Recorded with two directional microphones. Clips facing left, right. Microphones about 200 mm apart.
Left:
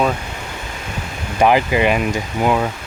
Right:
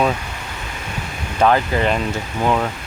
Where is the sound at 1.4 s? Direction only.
15° left (ahead or behind).